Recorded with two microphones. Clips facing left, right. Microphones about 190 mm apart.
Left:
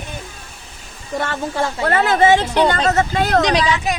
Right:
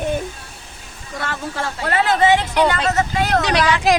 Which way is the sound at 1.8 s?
50° left (ahead or behind).